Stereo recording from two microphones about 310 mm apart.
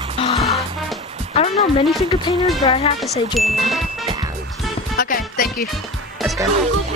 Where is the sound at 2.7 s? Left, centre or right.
Centre.